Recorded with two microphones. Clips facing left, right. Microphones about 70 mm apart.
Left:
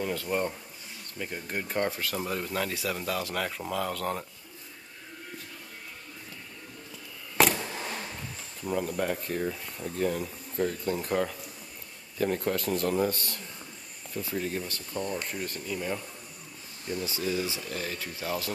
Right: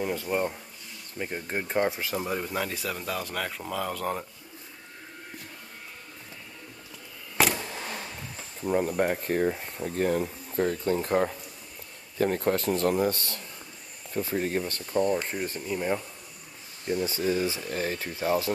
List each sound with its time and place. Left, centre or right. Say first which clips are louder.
0.0 s speech: right 2 dB; centre
1.1 s speech: right 3 dB; right; by 4.3 s centre
7.3 s vehicle: left 1 dB; centre
8.7 s speech: right 4 dB; right
17.0 s speech: right 4 dB; right